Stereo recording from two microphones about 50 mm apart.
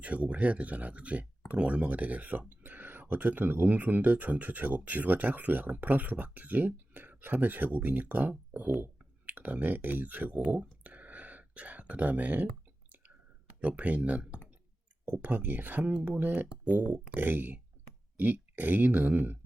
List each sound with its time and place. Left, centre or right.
0.0 s speech: right
10.8 s a sound: right
13.6 s speech: right